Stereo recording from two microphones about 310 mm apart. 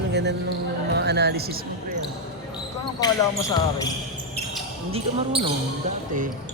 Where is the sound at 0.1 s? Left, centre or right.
Right.